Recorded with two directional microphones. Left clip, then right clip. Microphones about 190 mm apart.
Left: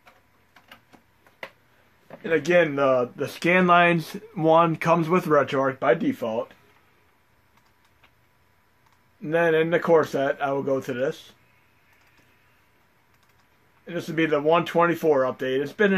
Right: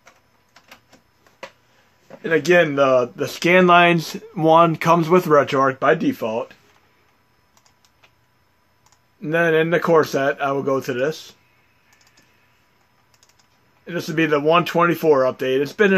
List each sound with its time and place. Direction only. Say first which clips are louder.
2.2 s speech: right 4 dB; 45° right (ahead or behind)
9.2 s speech: right 3 dB; 45° right (ahead or behind)
13.8 s speech: right 4 dB; 45° right (ahead or behind)